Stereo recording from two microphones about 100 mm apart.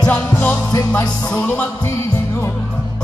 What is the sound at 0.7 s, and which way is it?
Music, 15° left (ahead or behind).